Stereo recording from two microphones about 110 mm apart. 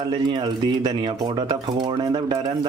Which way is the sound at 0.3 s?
40° right (ahead or behind).